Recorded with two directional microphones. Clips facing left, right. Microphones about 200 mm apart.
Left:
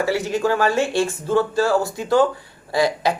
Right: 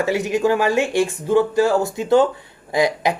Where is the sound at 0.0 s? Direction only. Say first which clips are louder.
Right 2 dB; 20° right (ahead or behind).